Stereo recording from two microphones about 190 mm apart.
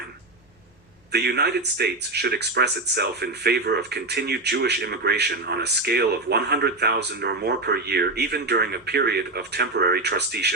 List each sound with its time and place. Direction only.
1.1 s speech: 60° right (ahead or behind)